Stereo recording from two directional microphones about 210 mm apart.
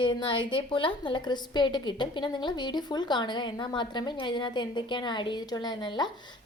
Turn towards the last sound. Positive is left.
turn(degrees=20)  # may be behind; listen again after turning